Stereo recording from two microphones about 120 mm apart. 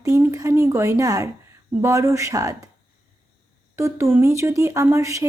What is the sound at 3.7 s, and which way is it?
Speech, 25° right (ahead or behind).